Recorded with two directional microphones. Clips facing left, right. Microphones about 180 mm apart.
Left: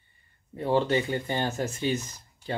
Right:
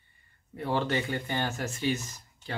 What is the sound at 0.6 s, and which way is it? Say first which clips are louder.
Speech: left 5 dB; 20° left (ahead or behind).